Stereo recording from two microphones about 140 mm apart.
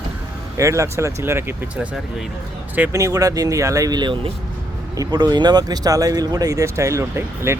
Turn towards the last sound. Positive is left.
turn(degrees=-20)  # may be behind; listen again after turning